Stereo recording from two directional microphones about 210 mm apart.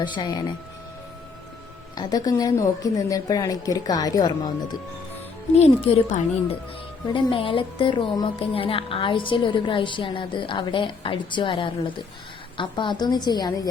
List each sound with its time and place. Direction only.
0.0 s a woman's voice: 20° left (ahead or behind)
2.0 s a woman's voice: 20° left (ahead or behind)
5.5 s a woman's voice: 30° left (ahead or behind)